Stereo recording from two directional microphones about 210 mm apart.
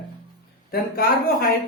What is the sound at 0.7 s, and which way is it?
Speech, 45° left (ahead or behind).